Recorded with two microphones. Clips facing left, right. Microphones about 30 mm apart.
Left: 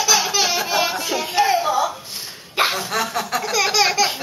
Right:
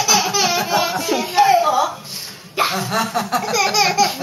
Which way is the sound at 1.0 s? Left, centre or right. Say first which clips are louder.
Right 4 dB; centre.